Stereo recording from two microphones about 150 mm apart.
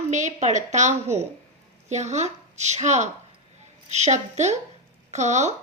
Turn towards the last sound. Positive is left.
turn(degrees=-50)  # may be behind; listen again after turning